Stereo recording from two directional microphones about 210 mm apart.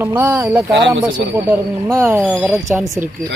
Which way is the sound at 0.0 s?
10° right (ahead or behind).